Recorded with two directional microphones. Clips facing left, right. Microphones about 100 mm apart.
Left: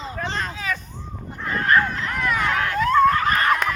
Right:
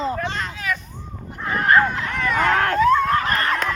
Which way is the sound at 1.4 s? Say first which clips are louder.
Right 2 dB; 20° right (ahead or behind).